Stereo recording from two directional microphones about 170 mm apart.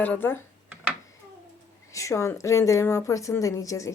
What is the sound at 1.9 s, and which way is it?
A woman's voice, 20° left (ahead or behind).